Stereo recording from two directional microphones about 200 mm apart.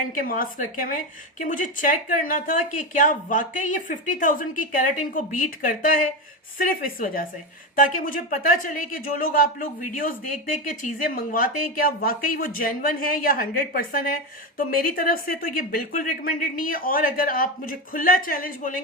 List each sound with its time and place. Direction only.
0.2 s speech: 45° left (ahead or behind)